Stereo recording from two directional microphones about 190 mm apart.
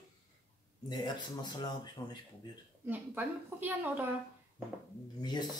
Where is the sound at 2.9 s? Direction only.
10° right (ahead or behind).